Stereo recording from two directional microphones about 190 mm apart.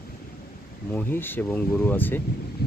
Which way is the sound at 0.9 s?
10° left (ahead or behind).